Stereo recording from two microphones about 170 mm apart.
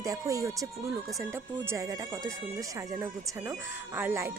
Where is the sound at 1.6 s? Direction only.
20° right (ahead or behind).